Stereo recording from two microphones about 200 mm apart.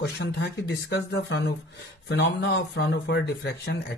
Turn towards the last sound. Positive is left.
turn(degrees=55)  # may be behind; listen again after turning